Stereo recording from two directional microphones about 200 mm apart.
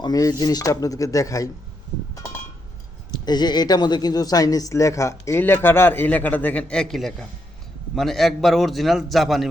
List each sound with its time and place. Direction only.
0.0 s speech: 20° left (ahead or behind)
3.2 s a man's voice: 20° left (ahead or behind); by 9.5 s centre (ahead or behind)